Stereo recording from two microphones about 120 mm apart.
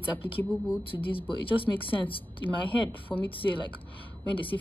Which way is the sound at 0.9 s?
45° left (ahead or behind).